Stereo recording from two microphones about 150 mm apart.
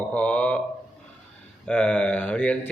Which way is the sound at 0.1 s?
10° left (ahead or behind).